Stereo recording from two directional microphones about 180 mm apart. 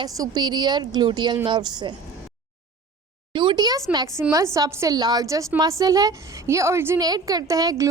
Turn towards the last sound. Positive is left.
turn(degrees=-20)  # may be behind; listen again after turning